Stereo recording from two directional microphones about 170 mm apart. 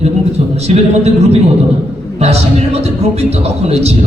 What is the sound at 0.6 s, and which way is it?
A man's voice, 40° right (ahead or behind).